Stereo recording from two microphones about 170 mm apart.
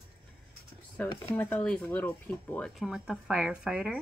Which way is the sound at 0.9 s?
10° left (ahead or behind).